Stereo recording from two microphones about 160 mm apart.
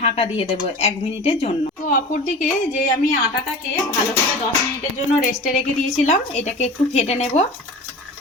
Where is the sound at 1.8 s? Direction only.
55° left (ahead or behind).